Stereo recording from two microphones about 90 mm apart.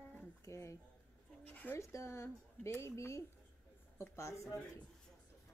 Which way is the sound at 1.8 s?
30° left (ahead or behind).